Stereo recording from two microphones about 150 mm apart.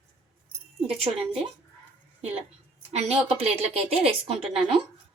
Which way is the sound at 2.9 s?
40° right (ahead or behind).